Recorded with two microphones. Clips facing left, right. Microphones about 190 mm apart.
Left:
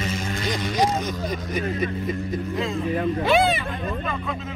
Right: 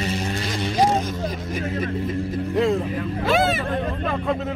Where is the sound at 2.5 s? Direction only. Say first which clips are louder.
Right 10 dB; 65° right (ahead or behind).